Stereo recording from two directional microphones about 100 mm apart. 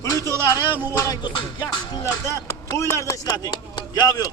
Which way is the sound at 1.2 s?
50° left (ahead or behind).